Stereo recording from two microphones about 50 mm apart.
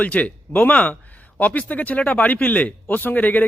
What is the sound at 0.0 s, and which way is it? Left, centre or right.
Speech, left.